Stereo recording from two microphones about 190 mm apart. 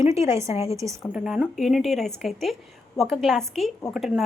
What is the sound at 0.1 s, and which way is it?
Speech, 15° right (ahead or behind).